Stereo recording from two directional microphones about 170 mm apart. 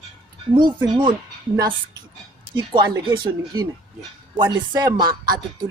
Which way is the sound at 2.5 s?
25° right (ahead or behind).